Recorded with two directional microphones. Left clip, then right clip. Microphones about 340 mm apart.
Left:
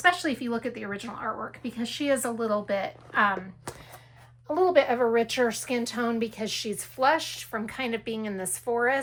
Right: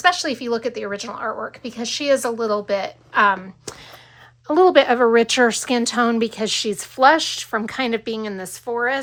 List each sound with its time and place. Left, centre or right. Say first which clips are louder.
0.0 s a woman's voice: right 6 dB; centre
4.5 s speech: right 8 dB; right; by 9.0 s centre